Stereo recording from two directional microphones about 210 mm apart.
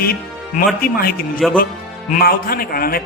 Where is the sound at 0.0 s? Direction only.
45° left (ahead or behind).